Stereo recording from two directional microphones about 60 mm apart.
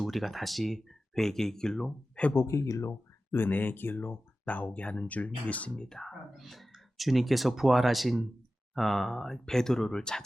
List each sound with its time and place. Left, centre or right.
0.0 s speech: centre
2.3 s speech: left
3.3 s speech: left; by 10.2 s centre